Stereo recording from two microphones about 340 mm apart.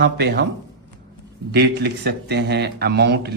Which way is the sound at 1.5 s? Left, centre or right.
Right.